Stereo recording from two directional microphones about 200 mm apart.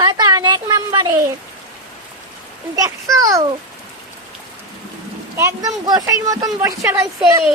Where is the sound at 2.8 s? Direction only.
15° right (ahead or behind).